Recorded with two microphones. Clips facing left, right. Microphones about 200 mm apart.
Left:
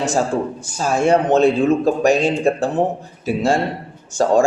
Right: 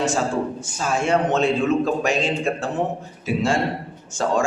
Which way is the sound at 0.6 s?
35° left (ahead or behind).